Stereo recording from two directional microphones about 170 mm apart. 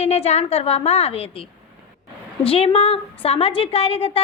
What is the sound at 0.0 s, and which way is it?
A woman's voice, 40° left (ahead or behind).